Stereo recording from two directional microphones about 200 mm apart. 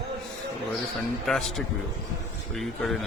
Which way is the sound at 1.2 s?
Centre (ahead or behind).